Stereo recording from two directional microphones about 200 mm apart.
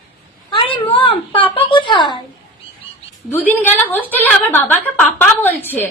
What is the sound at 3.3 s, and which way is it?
A woman's voice, 10° left (ahead or behind).